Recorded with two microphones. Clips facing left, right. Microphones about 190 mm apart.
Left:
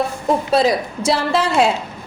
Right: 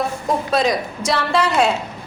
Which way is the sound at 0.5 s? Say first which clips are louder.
Left 3 dB; 30° left (ahead or behind).